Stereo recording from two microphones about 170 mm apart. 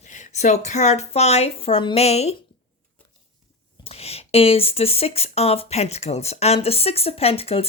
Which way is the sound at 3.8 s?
35° left (ahead or behind).